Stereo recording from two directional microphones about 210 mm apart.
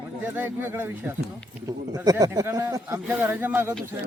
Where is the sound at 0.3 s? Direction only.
10° right (ahead or behind).